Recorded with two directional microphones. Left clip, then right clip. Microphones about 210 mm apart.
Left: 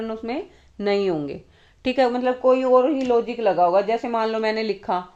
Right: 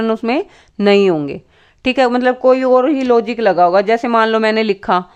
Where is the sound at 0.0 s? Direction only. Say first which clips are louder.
Right 12 dB; 45° right (ahead or behind).